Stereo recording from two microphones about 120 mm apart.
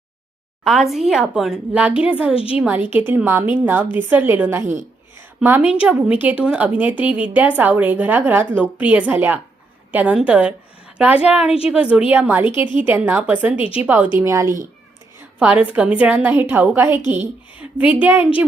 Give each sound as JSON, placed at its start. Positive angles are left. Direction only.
{"t": 0.6, "sound": "a woman's voice", "side_deg": 0}
{"t": 2.3, "sound": "a woman's voice", "side_deg": 50}
{"t": 2.6, "sound": "a woman's voice", "side_deg": -15}
{"t": 4.6, "sound": "a woman's voice", "side_deg": -90}
{"t": 5.4, "sound": "a woman's voice", "side_deg": -15}
{"t": 13.6, "sound": "a woman's voice", "side_deg": 50}
{"t": 13.8, "sound": "a woman's voice", "side_deg": -15}
{"t": 14.2, "sound": "a woman's voice", "side_deg": -25}
{"t": 15.4, "sound": "a woman's voice", "side_deg": -10}